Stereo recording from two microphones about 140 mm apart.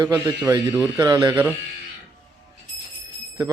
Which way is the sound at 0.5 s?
35° right (ahead or behind).